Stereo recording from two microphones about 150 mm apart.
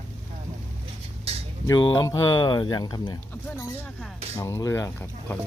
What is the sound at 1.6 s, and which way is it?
Speech, 30° left (ahead or behind).